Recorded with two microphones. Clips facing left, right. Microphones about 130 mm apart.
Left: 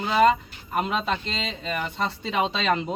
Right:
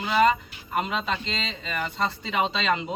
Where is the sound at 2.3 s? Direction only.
40° left (ahead or behind).